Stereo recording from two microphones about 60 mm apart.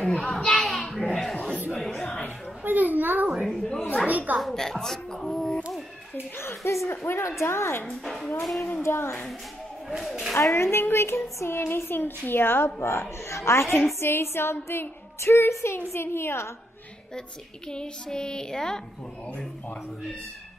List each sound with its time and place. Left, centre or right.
0.2 s a sound: centre
0.9 s laughter: centre
1.8 s music: centre
2.6 s a child's voice: right
3.3 s speech: centre
3.6 s child singing: centre
4.4 s a woman's voice: centre
6.3 s a sound: left
8.0 s speech: centre
8.8 s a sound: left
9.8 s speech: centre
10.5 s a woman's voice: left
13.5 s a sound: left
17.6 s child singing: centre